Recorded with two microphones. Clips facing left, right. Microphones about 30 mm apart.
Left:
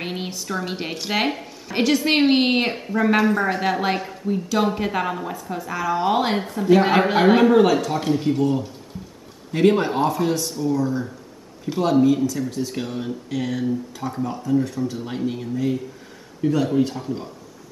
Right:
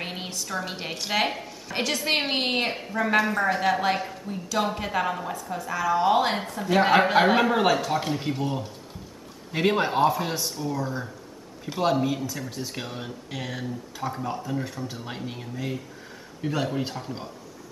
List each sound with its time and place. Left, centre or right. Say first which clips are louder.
0.0 s a woman's voice: left 4 dB; centre
15.0 s a woman's voice: left 8 dB; centre